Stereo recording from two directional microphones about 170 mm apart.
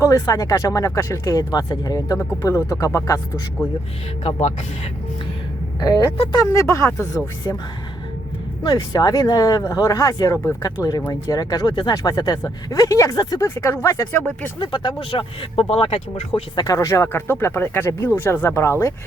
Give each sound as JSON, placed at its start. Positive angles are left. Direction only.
{"t": 0.0, "sound": "speech", "side_deg": 20}
{"t": 4.2, "sound": "speech", "side_deg": 40}
{"t": 6.3, "sound": "speech", "side_deg": 20}
{"t": 8.6, "sound": "speech", "side_deg": 25}
{"t": 14.6, "sound": "speech", "side_deg": 30}